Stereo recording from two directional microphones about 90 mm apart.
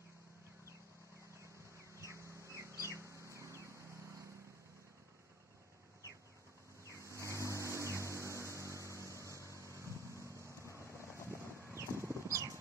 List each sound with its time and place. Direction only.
2.0 s bird: 35° right (ahead or behind)
2.8 s chicken: 35° right (ahead or behind)
6.9 s vehicle: 35° right (ahead or behind)
7.2 s vehicle: 35° left (ahead or behind)
7.5 s music: 30° right (ahead or behind)
7.8 s music: 30° left (ahead or behind)
8.5 s vehicle: 35° right (ahead or behind)
10.6 s vehicle: 30° left (ahead or behind)
11.2 s a sound: 30° right (ahead or behind)